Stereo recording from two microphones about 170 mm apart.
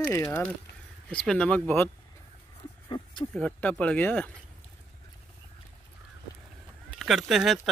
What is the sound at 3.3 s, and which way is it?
Speech, 10° left (ahead or behind).